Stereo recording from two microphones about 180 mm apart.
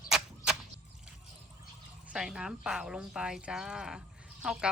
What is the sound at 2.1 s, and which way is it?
Speech, 5° right (ahead or behind).